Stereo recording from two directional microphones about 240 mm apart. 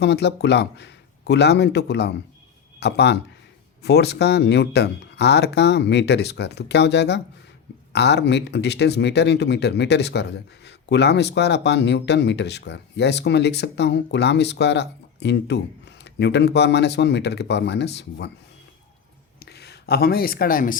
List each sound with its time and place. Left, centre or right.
0.0 s speech: left
19.4 s speech: left